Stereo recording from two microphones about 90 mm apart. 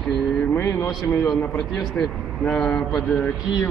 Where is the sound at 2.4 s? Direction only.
15° left (ahead or behind).